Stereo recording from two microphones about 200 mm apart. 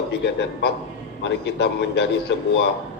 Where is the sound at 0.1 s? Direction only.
60° left (ahead or behind).